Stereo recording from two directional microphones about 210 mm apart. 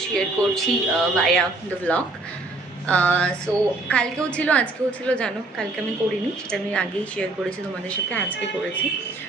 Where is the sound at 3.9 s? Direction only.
5° left (ahead or behind).